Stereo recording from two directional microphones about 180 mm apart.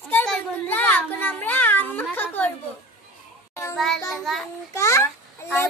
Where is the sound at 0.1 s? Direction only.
10° left (ahead or behind).